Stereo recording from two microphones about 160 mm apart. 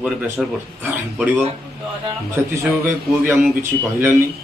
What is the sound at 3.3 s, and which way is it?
Speech, centre (ahead or behind).